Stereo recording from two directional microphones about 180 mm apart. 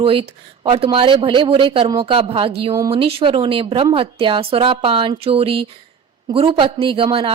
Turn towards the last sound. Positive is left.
turn(degrees=-30)  # may be behind; listen again after turning